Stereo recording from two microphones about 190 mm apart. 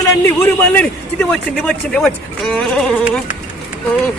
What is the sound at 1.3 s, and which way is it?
Speech, 5° left (ahead or behind).